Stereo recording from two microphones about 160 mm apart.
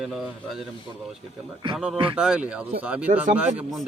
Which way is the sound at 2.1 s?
5° right (ahead or behind).